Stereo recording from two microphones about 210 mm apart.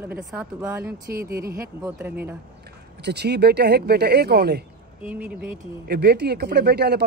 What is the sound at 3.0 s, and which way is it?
Speech, 50° right (ahead or behind).